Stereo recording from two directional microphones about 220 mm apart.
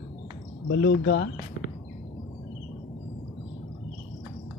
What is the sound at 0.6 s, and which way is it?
Speech, 55° left (ahead or behind).